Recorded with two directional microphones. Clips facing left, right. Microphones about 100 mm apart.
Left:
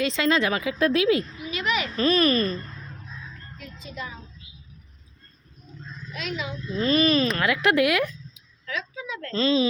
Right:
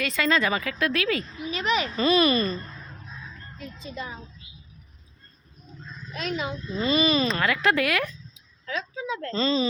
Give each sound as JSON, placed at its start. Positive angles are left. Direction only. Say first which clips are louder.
{"t": 0.0, "sound": "speech", "louder": "left 2 dB", "side_deg": 20}
{"t": 0.8, "sound": "speech", "louder": "left 7 dB", "side_deg": 35}
{"t": 1.5, "sound": "a sound", "louder": "right 4 dB", "side_deg": -30}
{"t": 2.0, "sound": "a child's voice", "louder": "left 1 dB", "side_deg": -5}
{"t": 3.6, "sound": "a woman's voice", "louder": "right 1 dB", "side_deg": -30}
{"t": 6.1, "sound": "speech", "louder": "right 2 dB", "side_deg": -45}
{"t": 6.7, "sound": "a child's voice", "louder": "left 2 dB", "side_deg": -5}
{"t": 7.4, "sound": "speech", "louder": "left 2 dB", "side_deg": 10}
{"t": 8.6, "sound": "a woman's voice", "louder": "right 2 dB", "side_deg": -30}
{"t": 9.3, "sound": "a child's voice", "louder": "left 3 dB", "side_deg": 5}